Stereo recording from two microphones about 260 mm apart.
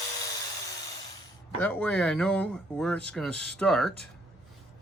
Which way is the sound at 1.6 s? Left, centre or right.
Centre.